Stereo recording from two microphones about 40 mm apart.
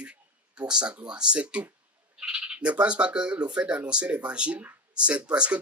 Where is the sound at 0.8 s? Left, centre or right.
Right.